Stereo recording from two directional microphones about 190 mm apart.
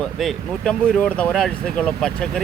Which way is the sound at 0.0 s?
Centre (ahead or behind).